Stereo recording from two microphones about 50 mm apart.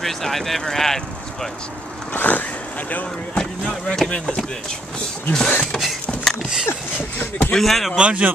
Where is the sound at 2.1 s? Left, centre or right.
Left.